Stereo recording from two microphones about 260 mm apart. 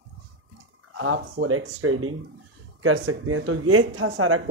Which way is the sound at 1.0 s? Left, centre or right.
Right.